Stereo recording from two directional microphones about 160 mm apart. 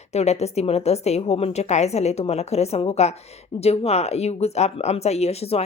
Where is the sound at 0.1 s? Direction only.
45° left (ahead or behind).